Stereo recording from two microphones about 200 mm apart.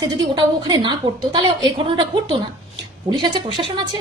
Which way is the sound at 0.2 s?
25° right (ahead or behind).